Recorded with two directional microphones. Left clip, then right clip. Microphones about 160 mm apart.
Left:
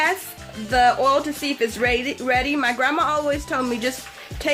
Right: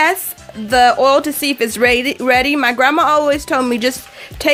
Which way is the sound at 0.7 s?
60° right (ahead or behind).